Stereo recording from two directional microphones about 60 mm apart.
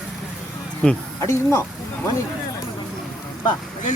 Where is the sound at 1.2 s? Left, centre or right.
Left.